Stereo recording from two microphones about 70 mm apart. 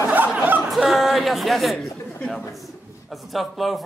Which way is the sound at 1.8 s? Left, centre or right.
Left.